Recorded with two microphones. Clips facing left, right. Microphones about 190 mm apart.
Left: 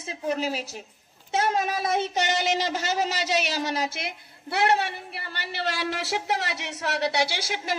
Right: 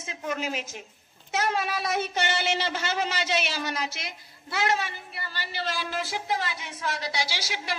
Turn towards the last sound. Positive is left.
turn(degrees=55)  # may be behind; listen again after turning